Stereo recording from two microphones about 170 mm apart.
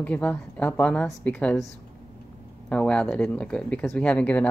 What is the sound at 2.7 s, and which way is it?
Speech, 5° left (ahead or behind).